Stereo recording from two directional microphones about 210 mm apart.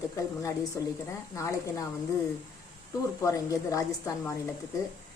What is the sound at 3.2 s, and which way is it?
A woman's voice, 15° left (ahead or behind).